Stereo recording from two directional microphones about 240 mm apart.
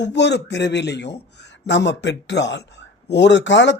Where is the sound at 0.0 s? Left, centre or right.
Left.